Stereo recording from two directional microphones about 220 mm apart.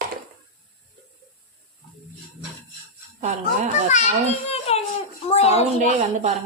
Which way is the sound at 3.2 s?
35° right (ahead or behind).